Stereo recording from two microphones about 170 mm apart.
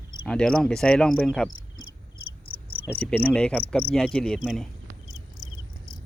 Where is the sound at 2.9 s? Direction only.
5° left (ahead or behind).